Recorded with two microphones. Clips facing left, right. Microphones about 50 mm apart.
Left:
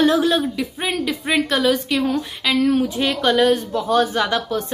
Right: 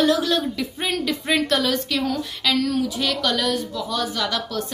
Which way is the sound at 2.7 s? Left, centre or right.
Left.